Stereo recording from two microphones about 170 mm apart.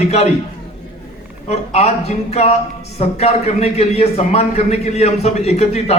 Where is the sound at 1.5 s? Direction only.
40° left (ahead or behind).